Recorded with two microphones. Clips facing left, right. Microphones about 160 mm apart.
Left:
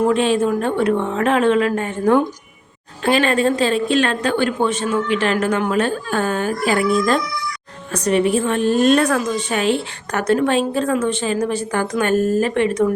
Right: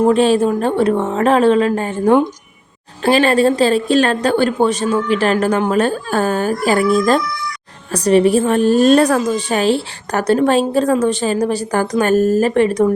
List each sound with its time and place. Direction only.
0.0 s a woman's voice: 35° right (ahead or behind)